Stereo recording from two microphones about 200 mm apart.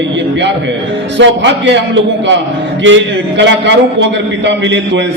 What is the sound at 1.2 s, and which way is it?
Speech, 65° right (ahead or behind).